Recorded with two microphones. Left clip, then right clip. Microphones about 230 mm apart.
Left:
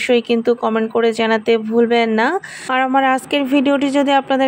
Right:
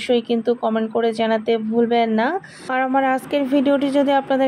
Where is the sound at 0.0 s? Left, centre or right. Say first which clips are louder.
Left 4 dB; left.